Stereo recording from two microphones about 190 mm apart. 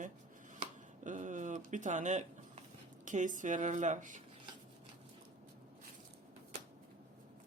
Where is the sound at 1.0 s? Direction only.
40° right (ahead or behind).